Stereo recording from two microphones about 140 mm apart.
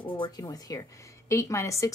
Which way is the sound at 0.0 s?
30° left (ahead or behind).